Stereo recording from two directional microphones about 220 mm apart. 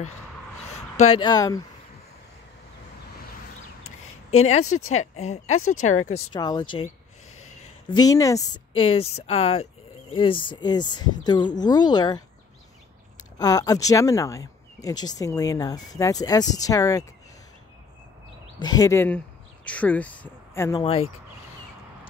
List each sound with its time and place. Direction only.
0.7 s speech: 30° left (ahead or behind)
4.6 s speech: 75° left (ahead or behind)
4.9 s speech: 30° left (ahead or behind)
5.5 s speech: 70° left (ahead or behind)
6.0 s speech: 30° left (ahead or behind)
6.3 s speech: 20° left (ahead or behind)
7.3 s a sound: 80° left
7.9 s speech: 15° left (ahead or behind)
13.2 s speech: 15° left (ahead or behind)
18.6 s speech: 15° left (ahead or behind)
20.8 s speech: 25° left (ahead or behind)